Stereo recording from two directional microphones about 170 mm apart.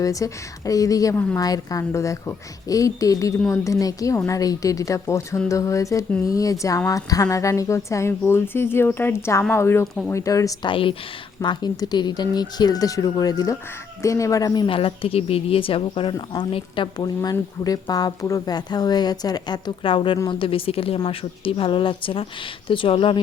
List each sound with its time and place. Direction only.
0.0 s a woman's voice: 20° left (ahead or behind)
9.8 s speech: centre (ahead or behind)
10.1 s speech: 20° left (ahead or behind)
16.1 s speech: 20° left (ahead or behind)
16.5 s speech: 30° left (ahead or behind)